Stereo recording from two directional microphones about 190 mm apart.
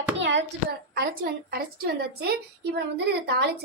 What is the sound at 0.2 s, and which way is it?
Hands, 75° right (ahead or behind).